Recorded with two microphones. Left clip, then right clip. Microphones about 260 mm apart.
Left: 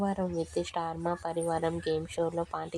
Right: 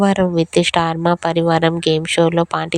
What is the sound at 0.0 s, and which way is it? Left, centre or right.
Speech, right.